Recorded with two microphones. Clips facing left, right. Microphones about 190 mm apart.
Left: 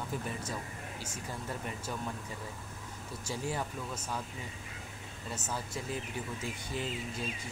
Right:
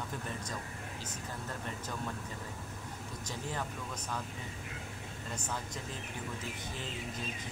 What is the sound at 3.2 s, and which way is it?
Speech, 10° left (ahead or behind).